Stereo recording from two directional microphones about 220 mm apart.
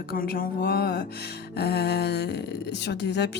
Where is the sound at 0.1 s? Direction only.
40° left (ahead or behind).